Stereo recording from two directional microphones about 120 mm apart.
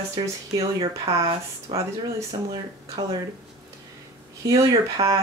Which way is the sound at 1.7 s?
50° right (ahead or behind).